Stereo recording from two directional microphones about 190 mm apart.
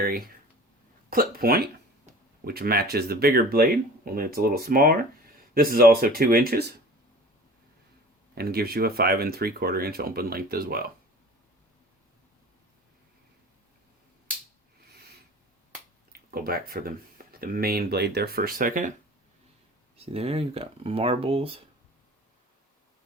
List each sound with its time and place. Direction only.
1.1 s speech: 50° right (ahead or behind)
8.4 s speech: 55° right (ahead or behind)
16.3 s speech: 50° right (ahead or behind)
20.1 s speech: 30° right (ahead or behind)